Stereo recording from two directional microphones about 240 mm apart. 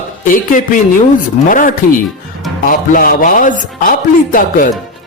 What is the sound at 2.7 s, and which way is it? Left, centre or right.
Speech, left.